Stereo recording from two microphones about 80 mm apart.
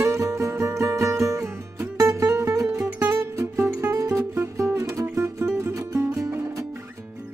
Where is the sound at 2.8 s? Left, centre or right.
Right.